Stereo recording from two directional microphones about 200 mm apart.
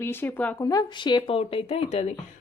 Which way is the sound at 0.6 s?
20° left (ahead or behind).